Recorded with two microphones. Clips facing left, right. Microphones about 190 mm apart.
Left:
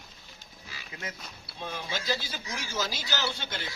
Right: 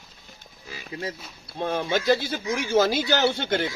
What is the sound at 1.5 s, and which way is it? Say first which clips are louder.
Speech: right 11 dB; 60° right (ahead or behind).